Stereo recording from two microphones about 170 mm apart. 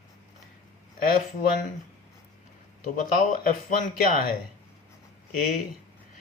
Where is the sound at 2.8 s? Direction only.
55° left (ahead or behind).